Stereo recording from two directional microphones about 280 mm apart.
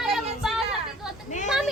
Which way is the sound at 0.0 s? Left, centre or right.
Centre.